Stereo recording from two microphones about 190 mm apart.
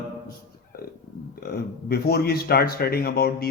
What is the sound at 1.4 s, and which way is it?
A man's voice, 55° left (ahead or behind).